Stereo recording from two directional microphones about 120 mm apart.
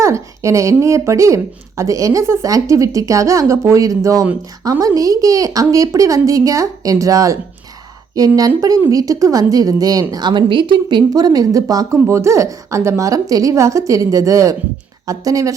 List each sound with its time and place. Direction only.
0.0 s a woman's voice: 25° right (ahead or behind)
8.4 s a woman's voice: 30° right (ahead or behind)